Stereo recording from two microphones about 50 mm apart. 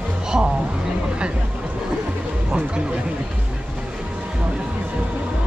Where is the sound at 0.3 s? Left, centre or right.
Centre.